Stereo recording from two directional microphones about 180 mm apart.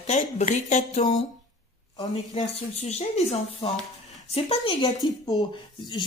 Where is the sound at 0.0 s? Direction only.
40° left (ahead or behind).